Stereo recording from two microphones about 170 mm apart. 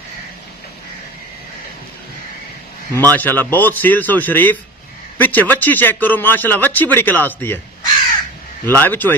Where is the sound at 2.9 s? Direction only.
10° left (ahead or behind).